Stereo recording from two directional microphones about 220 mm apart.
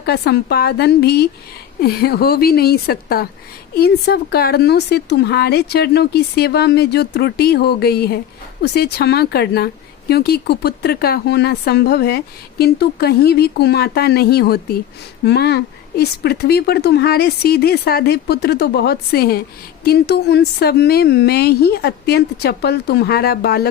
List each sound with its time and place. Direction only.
0.0 s speech: 45° left (ahead or behind)